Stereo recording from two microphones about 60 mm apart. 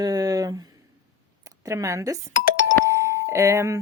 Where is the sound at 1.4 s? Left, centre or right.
Right.